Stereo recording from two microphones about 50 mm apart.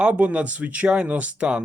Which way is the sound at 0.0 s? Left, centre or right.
Right.